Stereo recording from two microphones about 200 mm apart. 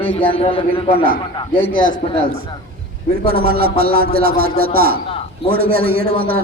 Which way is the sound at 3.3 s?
50° right (ahead or behind).